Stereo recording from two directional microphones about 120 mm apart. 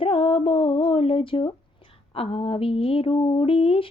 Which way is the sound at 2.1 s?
55° left (ahead or behind).